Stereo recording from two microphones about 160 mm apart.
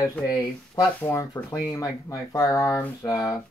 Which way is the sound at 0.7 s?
15° left (ahead or behind).